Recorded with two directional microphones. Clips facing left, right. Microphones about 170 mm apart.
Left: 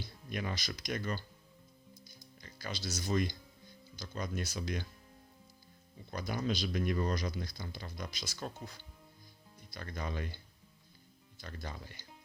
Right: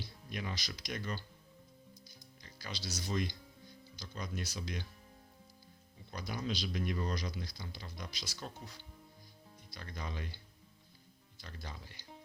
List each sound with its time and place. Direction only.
0.3 s speech: 50° left (ahead or behind)
2.0 s music: 50° left (ahead or behind)
3.9 s speech: 50° left (ahead or behind)
6.1 s speech: 50° left (ahead or behind)
9.6 s speech: 50° left (ahead or behind)
11.3 s speech: 50° left (ahead or behind)